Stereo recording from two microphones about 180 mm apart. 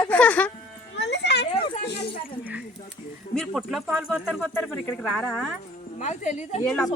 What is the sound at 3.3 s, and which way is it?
A woman's voice, centre (ahead or behind).